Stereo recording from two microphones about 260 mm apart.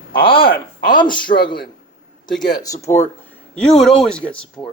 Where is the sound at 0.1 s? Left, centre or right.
Centre.